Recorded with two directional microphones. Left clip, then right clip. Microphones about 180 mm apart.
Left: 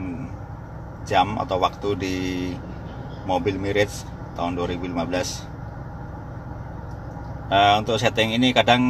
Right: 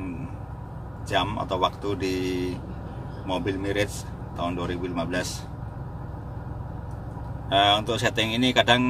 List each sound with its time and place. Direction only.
1.0 s speech: 30° left (ahead or behind)
7.4 s speech: 30° left (ahead or behind)